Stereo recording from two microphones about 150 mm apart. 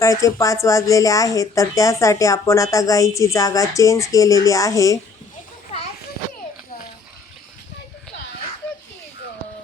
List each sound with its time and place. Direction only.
0.0 s speech: 20° left (ahead or behind)